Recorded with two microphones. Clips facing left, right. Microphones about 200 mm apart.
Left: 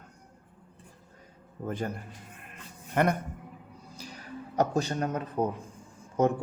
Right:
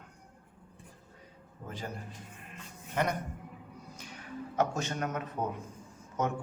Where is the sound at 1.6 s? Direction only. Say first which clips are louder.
Left 8 dB; 55° left (ahead or behind).